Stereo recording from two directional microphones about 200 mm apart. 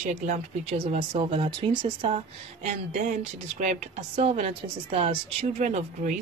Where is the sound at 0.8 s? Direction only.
30° right (ahead or behind).